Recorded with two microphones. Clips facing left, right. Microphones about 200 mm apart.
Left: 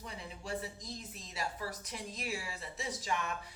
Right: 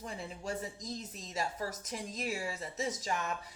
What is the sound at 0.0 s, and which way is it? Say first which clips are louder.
A woman's voice: right 5 dB; 45° right (ahead or behind).